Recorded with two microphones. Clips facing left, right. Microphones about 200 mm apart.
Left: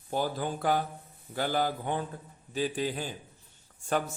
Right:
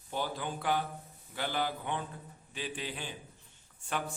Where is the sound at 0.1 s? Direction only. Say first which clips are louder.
Left 5 dB; 40° left (ahead or behind).